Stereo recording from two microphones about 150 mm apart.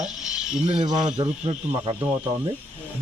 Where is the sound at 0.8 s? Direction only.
30° right (ahead or behind).